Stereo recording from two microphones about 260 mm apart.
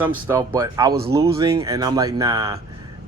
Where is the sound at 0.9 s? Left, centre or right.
Right.